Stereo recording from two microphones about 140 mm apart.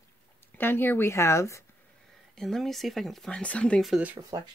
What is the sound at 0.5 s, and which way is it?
Speech, 15° left (ahead or behind).